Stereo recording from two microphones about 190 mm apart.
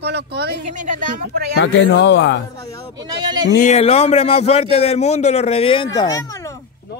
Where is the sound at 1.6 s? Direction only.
75° left (ahead or behind).